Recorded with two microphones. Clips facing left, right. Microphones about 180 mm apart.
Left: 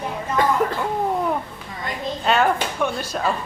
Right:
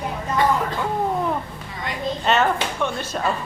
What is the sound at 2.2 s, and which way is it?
Speech, centre (ahead or behind).